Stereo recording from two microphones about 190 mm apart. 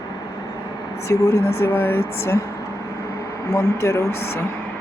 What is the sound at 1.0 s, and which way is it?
Speech, 15° left (ahead or behind).